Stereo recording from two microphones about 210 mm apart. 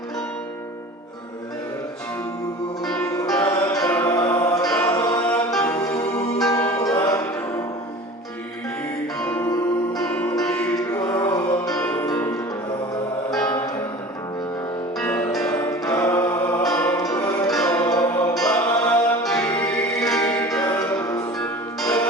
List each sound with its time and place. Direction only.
2.8 s music: 5° left (ahead or behind)
4.6 s music: 5° left (ahead or behind)
9.1 s music: 5° left (ahead or behind)
14.9 s music: 5° left (ahead or behind)
17.5 s music: 5° left (ahead or behind)
17.8 s music: 15° left (ahead or behind)
18.3 s music: 5° left (ahead or behind)